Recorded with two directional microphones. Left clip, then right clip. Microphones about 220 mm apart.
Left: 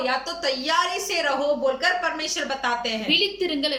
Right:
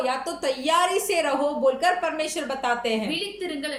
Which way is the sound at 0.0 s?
20° right (ahead or behind).